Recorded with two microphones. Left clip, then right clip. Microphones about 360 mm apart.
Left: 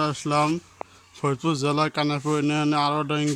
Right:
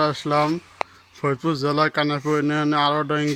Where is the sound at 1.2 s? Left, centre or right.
Centre.